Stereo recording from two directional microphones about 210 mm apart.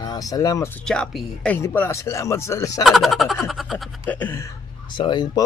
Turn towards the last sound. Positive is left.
turn(degrees=20)  # may be behind; listen again after turning